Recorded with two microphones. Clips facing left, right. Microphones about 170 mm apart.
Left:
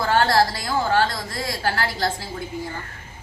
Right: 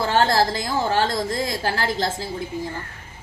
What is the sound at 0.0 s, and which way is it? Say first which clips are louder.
A woman's voice: even; 25° right (ahead or behind).